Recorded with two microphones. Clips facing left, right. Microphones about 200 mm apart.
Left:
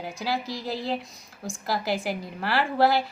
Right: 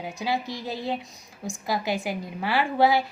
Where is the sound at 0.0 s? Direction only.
Centre (ahead or behind).